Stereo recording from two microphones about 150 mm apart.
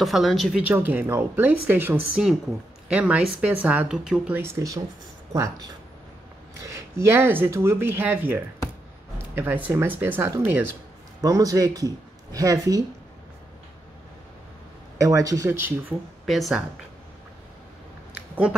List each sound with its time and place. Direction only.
0.0 s a woman's voice: centre (ahead or behind)
5.3 s a woman's voice: 25° right (ahead or behind)
15.0 s speech: 20° right (ahead or behind)
16.3 s a woman's voice: centre (ahead or behind)